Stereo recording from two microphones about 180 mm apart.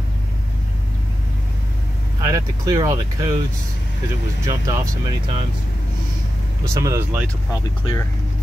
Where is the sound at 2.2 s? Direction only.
20° right (ahead or behind).